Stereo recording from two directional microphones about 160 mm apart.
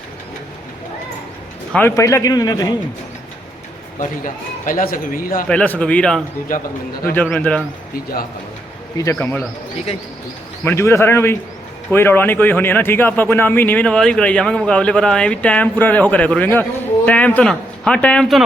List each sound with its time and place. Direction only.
1.7 s a man's voice: 15° left (ahead or behind)
4.0 s a man's voice: 55° left (ahead or behind)
5.5 s speech: 10° left (ahead or behind)
7.3 s speech: 5° left (ahead or behind)
9.0 s speech: 15° left (ahead or behind)
10.6 s speech: 15° left (ahead or behind)